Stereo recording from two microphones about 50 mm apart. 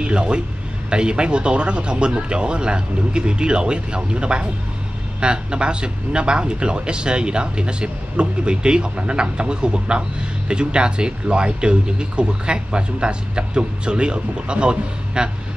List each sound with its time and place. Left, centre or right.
0.0 s a man's voice: centre